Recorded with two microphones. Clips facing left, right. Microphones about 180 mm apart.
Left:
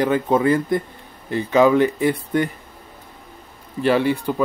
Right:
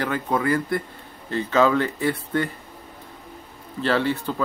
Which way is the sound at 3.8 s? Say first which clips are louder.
Left 4 dB; 15° left (ahead or behind).